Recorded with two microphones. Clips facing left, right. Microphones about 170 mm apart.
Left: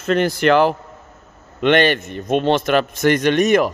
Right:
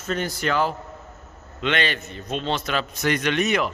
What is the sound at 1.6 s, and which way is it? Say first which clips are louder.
A man's voice: left 10 dB; 60° left (ahead or behind).